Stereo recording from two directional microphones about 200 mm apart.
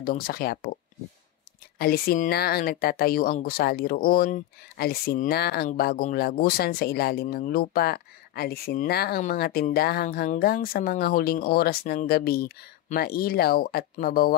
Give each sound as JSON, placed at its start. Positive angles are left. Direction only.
{"t": 0.0, "sound": "speech", "side_deg": 50}
{"t": 1.8, "sound": "speech", "side_deg": 50}